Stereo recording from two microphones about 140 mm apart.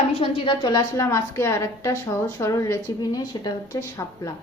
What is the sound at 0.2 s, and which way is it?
A woman's voice, 35° left (ahead or behind).